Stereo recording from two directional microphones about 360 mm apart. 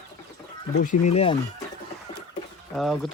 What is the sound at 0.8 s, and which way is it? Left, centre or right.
Speech, left.